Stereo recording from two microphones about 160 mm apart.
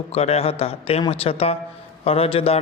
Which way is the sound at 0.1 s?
40° left (ahead or behind).